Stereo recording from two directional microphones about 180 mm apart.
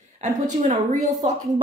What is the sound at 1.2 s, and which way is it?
Speech, 35° right (ahead or behind).